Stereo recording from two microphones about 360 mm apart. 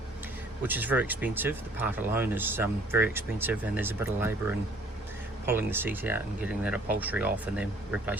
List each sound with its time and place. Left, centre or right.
0.6 s speech: centre